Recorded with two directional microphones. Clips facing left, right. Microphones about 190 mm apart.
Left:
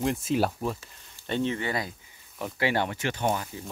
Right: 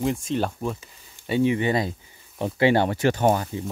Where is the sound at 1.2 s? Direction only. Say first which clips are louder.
Right 7 dB; 10° right (ahead or behind); by 3.5 s 45° right (ahead or behind).